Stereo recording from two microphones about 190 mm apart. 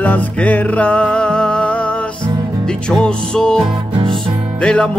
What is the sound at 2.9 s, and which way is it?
Music, 5° left (ahead or behind).